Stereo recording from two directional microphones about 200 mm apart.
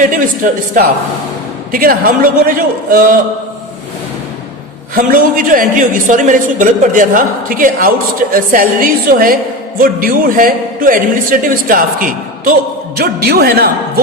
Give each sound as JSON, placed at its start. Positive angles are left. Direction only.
{"t": 0.1, "sound": "a woman's voice", "side_deg": -40}
{"t": 4.9, "sound": "a woman's voice", "side_deg": -45}